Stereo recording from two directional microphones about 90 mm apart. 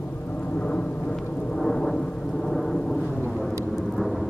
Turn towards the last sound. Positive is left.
turn(degrees=0)  # may be behind; listen again after turning